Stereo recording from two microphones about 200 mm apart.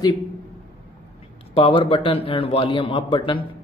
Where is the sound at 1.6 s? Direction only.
25° left (ahead or behind).